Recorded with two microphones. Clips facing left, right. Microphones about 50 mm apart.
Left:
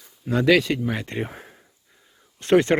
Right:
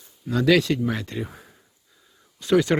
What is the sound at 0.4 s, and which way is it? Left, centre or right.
Speech, centre.